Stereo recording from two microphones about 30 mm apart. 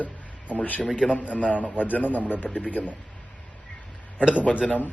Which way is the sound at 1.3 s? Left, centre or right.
Left.